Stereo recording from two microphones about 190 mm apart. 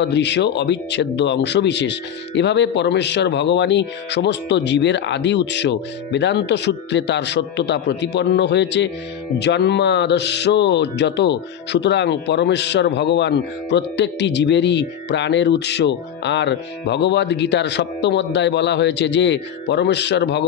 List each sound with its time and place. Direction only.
0.0 s speech: 65° left (ahead or behind)